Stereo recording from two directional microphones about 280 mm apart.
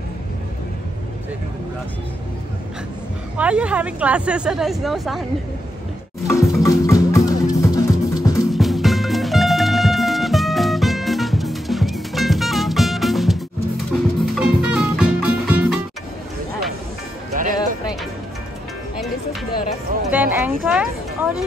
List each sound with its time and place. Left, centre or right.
3.3 s a woman's voice: centre
6.2 s music: centre
8.5 s music: centre
17.4 s music: right
20.1 s speech: centre